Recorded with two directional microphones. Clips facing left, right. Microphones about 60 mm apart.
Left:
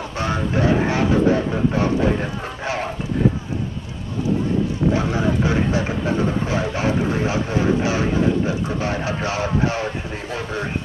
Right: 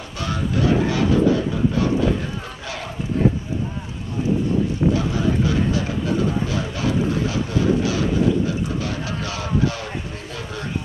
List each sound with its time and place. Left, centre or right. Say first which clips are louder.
0.2 s speech: left 2 dB; left
4.9 s speech: left 1 dB; left